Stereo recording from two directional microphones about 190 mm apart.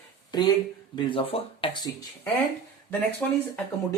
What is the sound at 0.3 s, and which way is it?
Speech, 20° left (ahead or behind).